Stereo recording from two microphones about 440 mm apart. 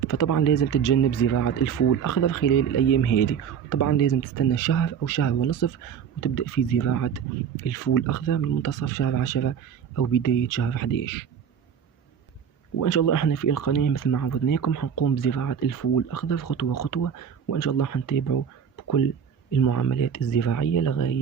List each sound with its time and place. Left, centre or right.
0.1 s speech: left
12.7 s speech: left